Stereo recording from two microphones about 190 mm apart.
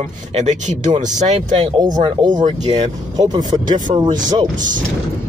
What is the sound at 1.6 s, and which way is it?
Speech, 25° right (ahead or behind).